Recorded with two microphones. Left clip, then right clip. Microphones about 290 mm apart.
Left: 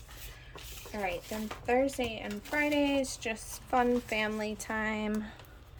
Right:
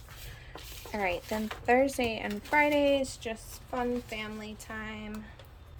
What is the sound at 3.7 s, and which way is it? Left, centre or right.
Speech, centre.